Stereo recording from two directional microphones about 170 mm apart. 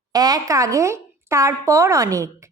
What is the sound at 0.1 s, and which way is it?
A woman's voice, 20° right (ahead or behind).